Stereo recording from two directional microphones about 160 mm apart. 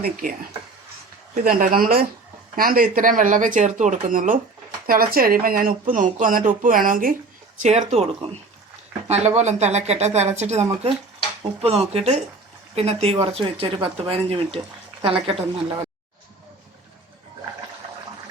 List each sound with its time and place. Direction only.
0.0 s speech: 65° right (ahead or behind)
1.5 s speech: 65° right (ahead or behind)
4.9 s speech: 65° right (ahead or behind)
7.6 s speech: 45° right (ahead or behind)